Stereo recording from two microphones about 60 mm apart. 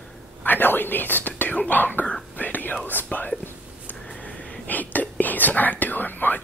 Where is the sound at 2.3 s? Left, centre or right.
Left.